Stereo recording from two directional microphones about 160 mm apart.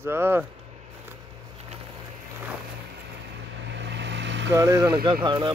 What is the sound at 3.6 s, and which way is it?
Vehicle, 90° right.